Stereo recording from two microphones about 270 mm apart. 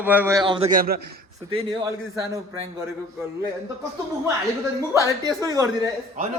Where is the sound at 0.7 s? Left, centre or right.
Right.